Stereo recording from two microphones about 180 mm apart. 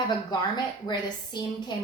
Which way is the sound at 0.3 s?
25° left (ahead or behind).